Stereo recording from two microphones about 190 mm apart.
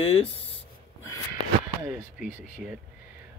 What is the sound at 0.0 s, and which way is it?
Speech, 30° left (ahead or behind).